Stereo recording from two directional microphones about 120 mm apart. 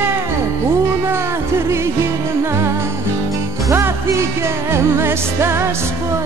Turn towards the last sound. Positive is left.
turn(degrees=-20)  # may be behind; listen again after turning